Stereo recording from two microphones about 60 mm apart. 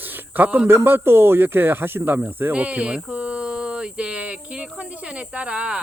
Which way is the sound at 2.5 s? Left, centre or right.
Right.